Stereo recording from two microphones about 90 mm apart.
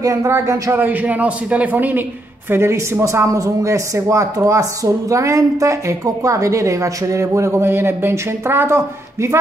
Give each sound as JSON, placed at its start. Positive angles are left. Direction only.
{"t": 0.0, "sound": "speech", "side_deg": -40}
{"t": 0.7, "sound": "a man's voice", "side_deg": -20}